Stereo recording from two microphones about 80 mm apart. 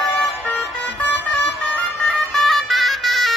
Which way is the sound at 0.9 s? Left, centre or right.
Left.